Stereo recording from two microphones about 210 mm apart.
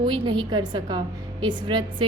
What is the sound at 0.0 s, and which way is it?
Speech, 20° right (ahead or behind).